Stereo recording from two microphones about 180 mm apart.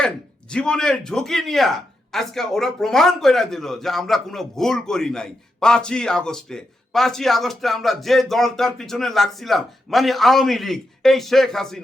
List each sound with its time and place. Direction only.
0.5 s speech: 5° left (ahead or behind)